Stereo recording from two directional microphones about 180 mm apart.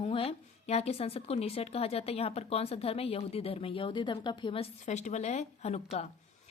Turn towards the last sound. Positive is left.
turn(degrees=35)  # may be behind; listen again after turning